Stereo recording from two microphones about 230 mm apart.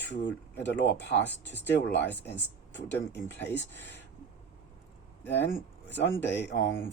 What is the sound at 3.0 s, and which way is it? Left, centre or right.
Speech, left.